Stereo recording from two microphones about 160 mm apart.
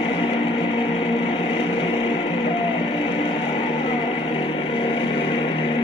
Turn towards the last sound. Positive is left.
turn(degrees=30)  # may be behind; listen again after turning